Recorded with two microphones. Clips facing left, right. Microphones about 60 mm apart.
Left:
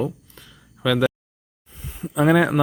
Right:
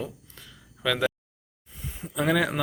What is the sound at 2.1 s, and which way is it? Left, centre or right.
Speech, left.